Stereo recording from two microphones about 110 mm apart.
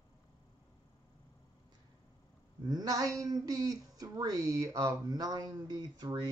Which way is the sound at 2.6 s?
40° right (ahead or behind).